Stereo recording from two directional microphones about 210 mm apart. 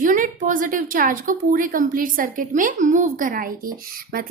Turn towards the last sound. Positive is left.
turn(degrees=-45)  # may be behind; listen again after turning